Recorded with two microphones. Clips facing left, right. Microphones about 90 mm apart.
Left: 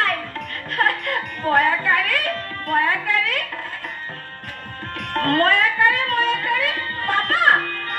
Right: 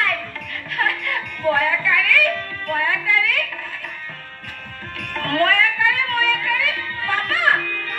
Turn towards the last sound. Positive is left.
turn(degrees=45)  # may be behind; listen again after turning